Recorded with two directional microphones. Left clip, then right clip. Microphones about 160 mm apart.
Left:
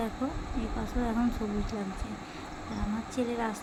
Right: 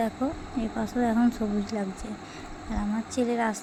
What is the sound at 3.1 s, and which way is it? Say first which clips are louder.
Speech: right 6 dB; 30° right (ahead or behind).